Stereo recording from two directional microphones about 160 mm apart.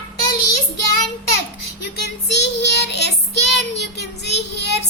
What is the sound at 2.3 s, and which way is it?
Child singing, 90° left.